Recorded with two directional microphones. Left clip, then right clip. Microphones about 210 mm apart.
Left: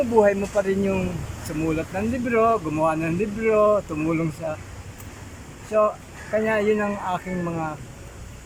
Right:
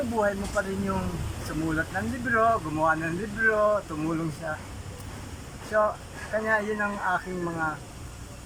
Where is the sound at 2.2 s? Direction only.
20° left (ahead or behind).